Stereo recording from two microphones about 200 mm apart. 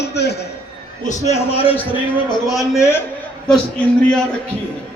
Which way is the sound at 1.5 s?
30° left (ahead or behind).